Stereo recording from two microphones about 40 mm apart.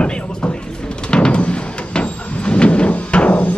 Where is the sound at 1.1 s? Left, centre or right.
Left.